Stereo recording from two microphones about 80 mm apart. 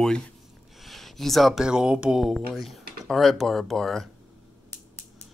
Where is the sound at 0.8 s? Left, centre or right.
Centre.